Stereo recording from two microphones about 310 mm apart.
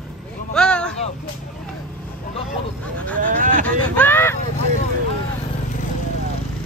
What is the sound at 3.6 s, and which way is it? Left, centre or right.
Speech, centre.